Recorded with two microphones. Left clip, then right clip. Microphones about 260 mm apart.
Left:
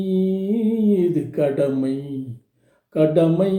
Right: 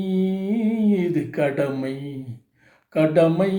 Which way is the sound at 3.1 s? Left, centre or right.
Centre.